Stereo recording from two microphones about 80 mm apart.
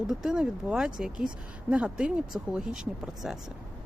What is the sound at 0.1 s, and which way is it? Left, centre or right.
Speech, centre.